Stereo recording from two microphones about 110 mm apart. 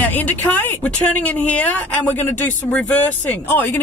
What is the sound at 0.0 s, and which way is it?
Speech, 15° left (ahead or behind).